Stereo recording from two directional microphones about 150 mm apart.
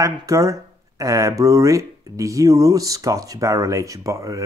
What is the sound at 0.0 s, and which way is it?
Speech, 20° right (ahead or behind).